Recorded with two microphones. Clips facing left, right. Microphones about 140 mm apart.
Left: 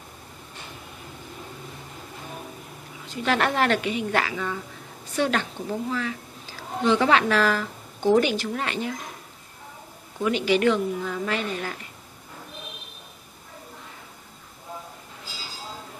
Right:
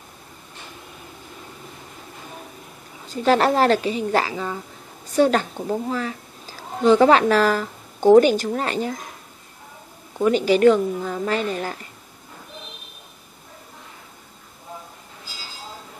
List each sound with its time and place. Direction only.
3.1 s a woman's voice: 35° right (ahead or behind)
10.2 s a woman's voice: 40° right (ahead or behind)